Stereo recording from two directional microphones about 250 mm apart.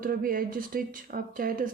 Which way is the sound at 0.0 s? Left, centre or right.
Right.